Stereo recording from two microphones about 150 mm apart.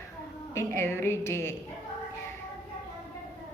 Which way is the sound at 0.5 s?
15° left (ahead or behind).